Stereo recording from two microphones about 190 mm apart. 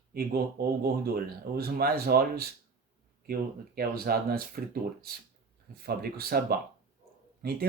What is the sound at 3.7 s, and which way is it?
Speech, 50° right (ahead or behind).